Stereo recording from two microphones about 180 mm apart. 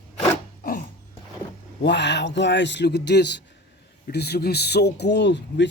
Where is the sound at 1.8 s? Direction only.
70° left (ahead or behind).